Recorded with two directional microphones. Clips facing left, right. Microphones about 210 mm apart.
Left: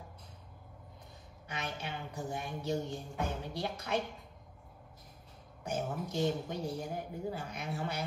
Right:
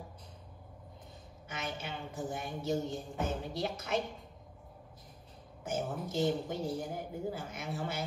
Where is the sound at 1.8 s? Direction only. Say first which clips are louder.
Right 1 dB; 20° right (ahead or behind).